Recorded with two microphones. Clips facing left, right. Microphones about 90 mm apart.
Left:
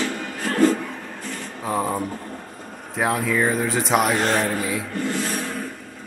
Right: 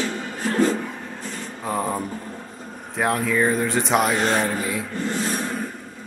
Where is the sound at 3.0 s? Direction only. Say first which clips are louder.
Even; centre (ahead or behind).